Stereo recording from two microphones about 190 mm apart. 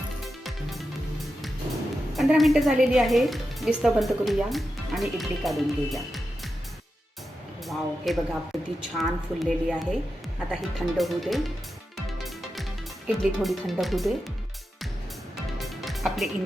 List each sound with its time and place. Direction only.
2.1 s a woman's voice: centre (ahead or behind)
7.7 s a woman's voice: centre (ahead or behind)
11.9 s music: centre (ahead or behind)
13.1 s a woman's voice: centre (ahead or behind)
15.5 s music: centre (ahead or behind)